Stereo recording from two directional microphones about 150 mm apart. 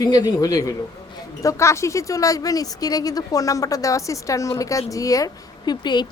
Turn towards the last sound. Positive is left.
turn(degrees=30)  # may be behind; listen again after turning